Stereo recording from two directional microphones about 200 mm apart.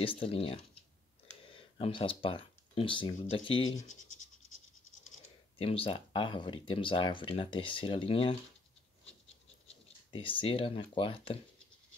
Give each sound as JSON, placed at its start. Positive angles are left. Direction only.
{"t": 0.2, "sound": "speech", "side_deg": 30}
{"t": 5.6, "sound": "speech", "side_deg": 25}
{"t": 10.1, "sound": "speech", "side_deg": 25}